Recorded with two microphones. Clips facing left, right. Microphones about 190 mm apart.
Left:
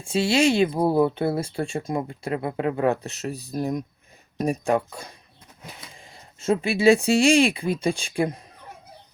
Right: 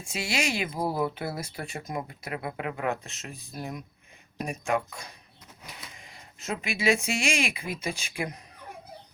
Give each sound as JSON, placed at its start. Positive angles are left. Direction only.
{"t": 0.0, "sound": "speech", "side_deg": 30}